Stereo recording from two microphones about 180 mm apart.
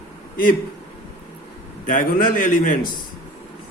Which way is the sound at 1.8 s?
50° left (ahead or behind).